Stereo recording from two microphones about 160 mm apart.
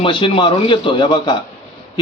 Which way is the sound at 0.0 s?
30° left (ahead or behind).